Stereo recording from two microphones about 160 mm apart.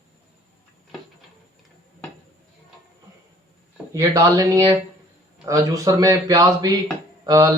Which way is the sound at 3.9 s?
20° right (ahead or behind).